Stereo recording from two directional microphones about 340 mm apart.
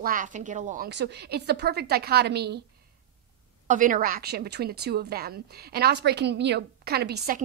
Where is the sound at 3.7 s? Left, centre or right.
Right.